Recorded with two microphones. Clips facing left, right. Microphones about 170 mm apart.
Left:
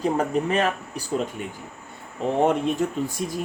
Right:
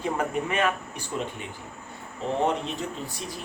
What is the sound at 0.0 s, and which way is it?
Speech, 35° left (ahead or behind).